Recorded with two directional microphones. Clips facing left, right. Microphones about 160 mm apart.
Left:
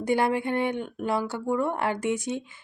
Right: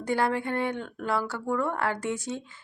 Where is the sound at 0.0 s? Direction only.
15° left (ahead or behind).